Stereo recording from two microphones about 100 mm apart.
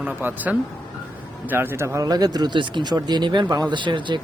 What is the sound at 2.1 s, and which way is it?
A man's voice, 40° right (ahead or behind).